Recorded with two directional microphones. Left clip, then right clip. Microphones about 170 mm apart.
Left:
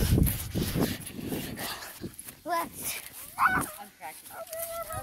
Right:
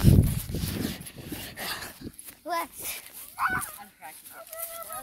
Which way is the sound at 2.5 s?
10° left (ahead or behind).